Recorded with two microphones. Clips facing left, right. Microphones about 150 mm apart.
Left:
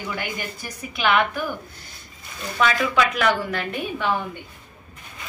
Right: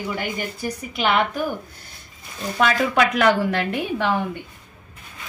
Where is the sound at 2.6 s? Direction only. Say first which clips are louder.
Right 2 dB; 55° right (ahead or behind); by 4.1 s 80° right.